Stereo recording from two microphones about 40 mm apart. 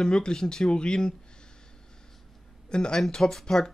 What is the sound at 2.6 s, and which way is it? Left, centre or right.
Speech, centre.